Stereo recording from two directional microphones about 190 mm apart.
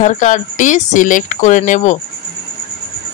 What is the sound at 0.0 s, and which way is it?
Speech, 40° left (ahead or behind).